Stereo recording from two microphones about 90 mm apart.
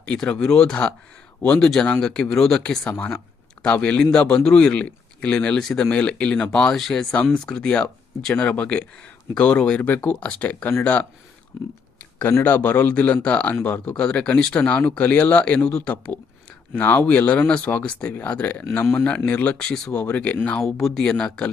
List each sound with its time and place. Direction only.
0.0 s speech: 10° left (ahead or behind)
12.3 s speech: 25° left (ahead or behind)